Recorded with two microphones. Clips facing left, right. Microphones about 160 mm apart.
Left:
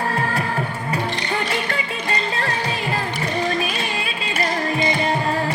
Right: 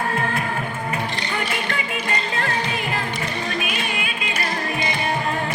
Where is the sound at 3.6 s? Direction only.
30° left (ahead or behind).